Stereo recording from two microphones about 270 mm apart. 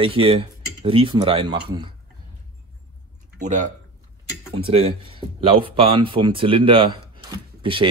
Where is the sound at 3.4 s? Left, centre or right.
Right.